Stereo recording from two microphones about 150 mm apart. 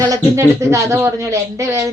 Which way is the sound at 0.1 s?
20° right (ahead or behind).